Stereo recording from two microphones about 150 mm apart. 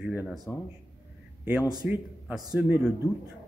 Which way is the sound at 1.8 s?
5° right (ahead or behind).